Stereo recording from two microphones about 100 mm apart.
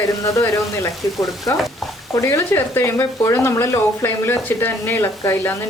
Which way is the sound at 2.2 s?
25° left (ahead or behind).